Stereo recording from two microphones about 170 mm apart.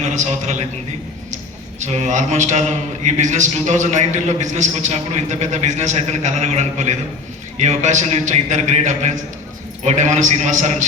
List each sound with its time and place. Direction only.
0.0 s a man's voice: 45° right (ahead or behind)
1.8 s a man's voice: 40° right (ahead or behind)